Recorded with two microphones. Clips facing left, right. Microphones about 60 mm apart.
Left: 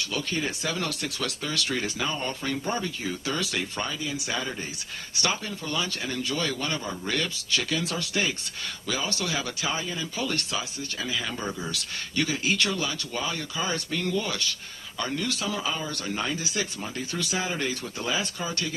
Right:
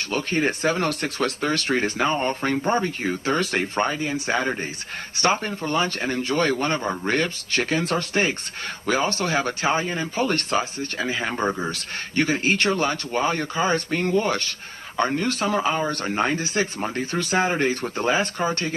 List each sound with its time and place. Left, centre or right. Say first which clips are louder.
0.0 s a man's voice: right 6 dB; right